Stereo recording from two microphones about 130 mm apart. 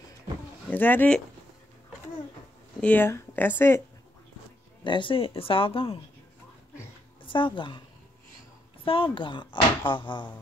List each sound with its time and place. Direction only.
0.7 s speech: 15° left (ahead or behind)
2.8 s speech: 15° left (ahead or behind)
4.8 s speech: 40° left (ahead or behind)
7.2 s speech: 40° left (ahead or behind)
8.8 s speech: 45° left (ahead or behind)